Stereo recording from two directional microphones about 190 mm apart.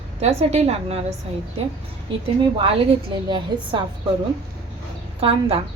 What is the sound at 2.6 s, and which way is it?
A woman's voice, 30° right (ahead or behind).